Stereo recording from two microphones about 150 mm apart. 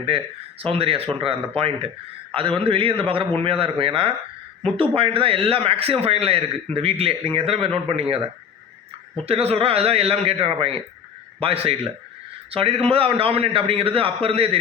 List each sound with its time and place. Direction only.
0.1 s a man's voice: 40° right (ahead or behind)
9.2 s a man's voice: 40° right (ahead or behind)